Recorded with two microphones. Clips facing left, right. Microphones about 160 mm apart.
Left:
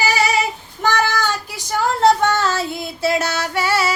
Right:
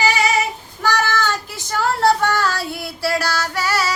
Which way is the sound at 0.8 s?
15° left (ahead or behind).